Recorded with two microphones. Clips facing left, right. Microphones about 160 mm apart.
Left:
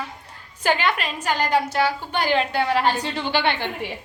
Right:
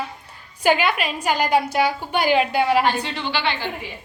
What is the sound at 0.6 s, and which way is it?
A woman's voice, 10° right (ahead or behind).